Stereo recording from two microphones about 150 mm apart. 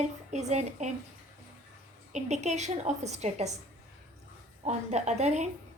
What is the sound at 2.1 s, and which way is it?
Speech, 50° right (ahead or behind).